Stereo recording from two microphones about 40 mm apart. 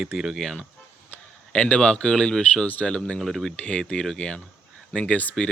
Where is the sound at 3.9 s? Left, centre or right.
Centre.